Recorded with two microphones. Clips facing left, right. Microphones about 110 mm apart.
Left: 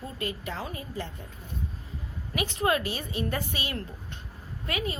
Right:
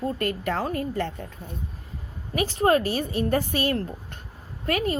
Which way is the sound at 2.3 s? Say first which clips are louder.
Right 6 dB; 35° right (ahead or behind).